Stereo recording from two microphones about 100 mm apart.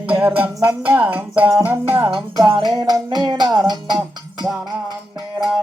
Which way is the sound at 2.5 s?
50° right (ahead or behind).